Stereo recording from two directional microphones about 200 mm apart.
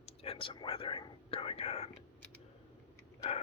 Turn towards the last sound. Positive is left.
turn(degrees=30)  # may be behind; listen again after turning